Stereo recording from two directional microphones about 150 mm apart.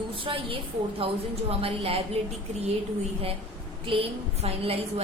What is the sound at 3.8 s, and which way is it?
A woman's voice, 35° right (ahead or behind).